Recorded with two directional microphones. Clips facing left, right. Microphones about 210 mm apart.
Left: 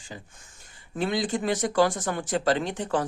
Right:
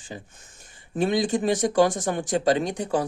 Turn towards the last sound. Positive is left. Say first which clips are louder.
# right 2 dB
turn(degrees=-10)  # may be behind; listen again after turning